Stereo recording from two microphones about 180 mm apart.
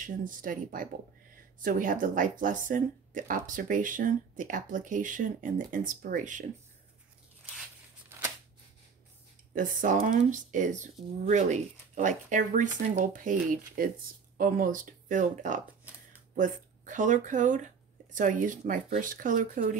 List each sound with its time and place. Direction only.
0.0 s speech: 50° right (ahead or behind)
8.1 s a sound: 10° right (ahead or behind)
9.6 s speech: 45° right (ahead or behind)